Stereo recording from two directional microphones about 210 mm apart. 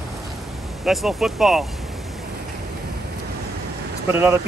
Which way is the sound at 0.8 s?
Centre (ahead or behind).